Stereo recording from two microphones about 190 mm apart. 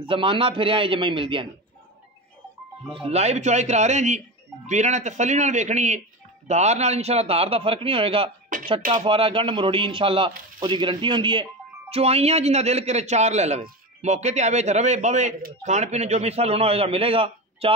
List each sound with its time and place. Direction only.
0.0 s a man's voice: 25° right (ahead or behind)
2.9 s a man's voice: 35° right (ahead or behind)
8.5 s a sound: 45° right (ahead or behind)
8.9 s a man's voice: 30° right (ahead or behind)